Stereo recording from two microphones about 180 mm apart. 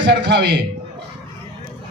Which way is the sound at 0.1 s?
70° right (ahead or behind).